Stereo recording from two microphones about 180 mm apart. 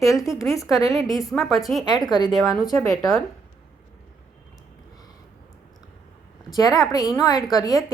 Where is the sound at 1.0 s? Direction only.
20° left (ahead or behind).